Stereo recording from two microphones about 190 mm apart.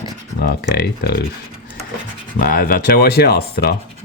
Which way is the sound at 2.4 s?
50° left (ahead or behind).